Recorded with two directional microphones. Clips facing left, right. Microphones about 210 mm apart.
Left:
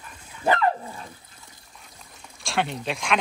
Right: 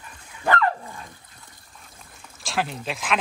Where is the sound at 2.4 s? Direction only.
Centre (ahead or behind).